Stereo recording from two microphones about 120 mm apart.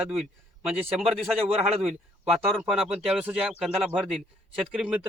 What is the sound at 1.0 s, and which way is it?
Speech, centre (ahead or behind).